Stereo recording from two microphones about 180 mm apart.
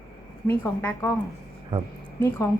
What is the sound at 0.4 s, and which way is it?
Speech, 10° left (ahead or behind).